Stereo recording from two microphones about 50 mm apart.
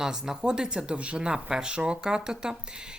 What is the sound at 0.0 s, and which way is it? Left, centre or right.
Speech, centre.